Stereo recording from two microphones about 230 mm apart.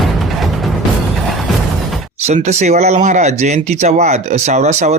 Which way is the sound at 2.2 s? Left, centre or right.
Right.